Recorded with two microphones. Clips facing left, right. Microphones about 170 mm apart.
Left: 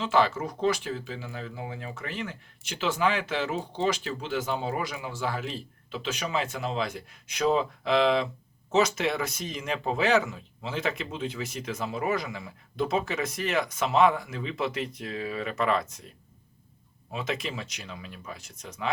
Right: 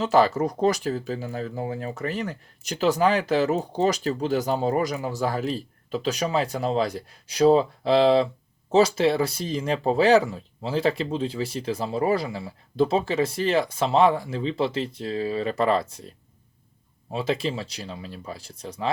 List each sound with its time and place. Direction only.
0.0 s speech: 40° right (ahead or behind)